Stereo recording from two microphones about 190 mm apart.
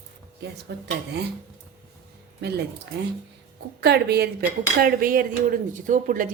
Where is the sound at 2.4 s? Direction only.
60° right (ahead or behind).